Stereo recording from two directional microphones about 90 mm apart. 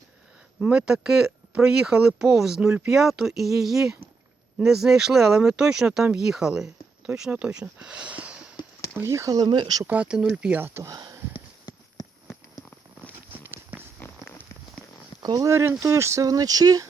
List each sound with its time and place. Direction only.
0.6 s speech: 5° right (ahead or behind)
9.0 s speech: 30° right (ahead or behind); by 9.8 s 50° right (ahead or behind)
9.8 s speech: 15° right (ahead or behind)
10.6 s speech: 25° right (ahead or behind)
10.9 s sniff: 50° right (ahead or behind)
11.7 s a sound: 50° left (ahead or behind)
13.3 s walk: 20° right (ahead or behind)
13.7 s a sound: 20° left (ahead or behind)
15.2 s speech: 40° right (ahead or behind)